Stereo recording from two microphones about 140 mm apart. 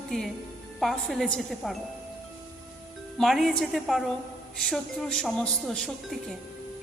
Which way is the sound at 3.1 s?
Centre (ahead or behind).